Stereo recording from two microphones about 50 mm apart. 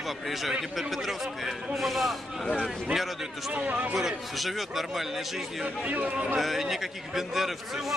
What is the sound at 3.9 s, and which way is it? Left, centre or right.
A man's voice, centre.